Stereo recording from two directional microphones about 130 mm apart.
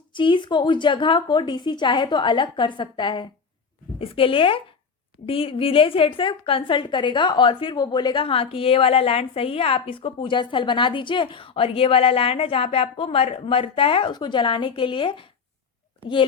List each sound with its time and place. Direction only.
0.1 s a woman's voice: 40° left (ahead or behind)